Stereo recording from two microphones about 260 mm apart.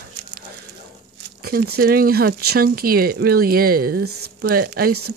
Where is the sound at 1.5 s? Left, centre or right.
Right.